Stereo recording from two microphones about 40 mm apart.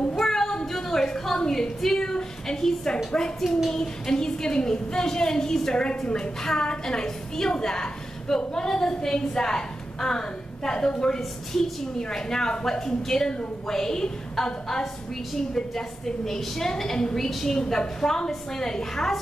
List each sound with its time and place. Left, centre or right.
0.1 s a sound: centre
1.8 s a woman's voice: centre
3.3 s a child's voice: centre
3.7 s a woman's voice: centre
11.1 s a woman's voice: centre
16.3 s a woman's voice: centre